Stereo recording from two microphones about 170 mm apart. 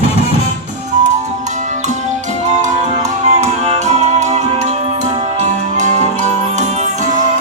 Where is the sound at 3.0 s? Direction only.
40° right (ahead or behind).